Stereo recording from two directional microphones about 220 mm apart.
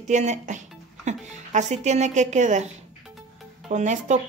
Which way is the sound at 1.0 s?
35° right (ahead or behind).